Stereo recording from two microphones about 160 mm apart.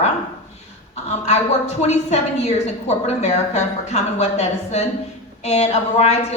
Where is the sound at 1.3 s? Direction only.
45° left (ahead or behind).